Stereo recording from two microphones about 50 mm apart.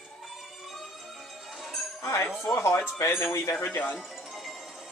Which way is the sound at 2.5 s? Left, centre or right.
Left.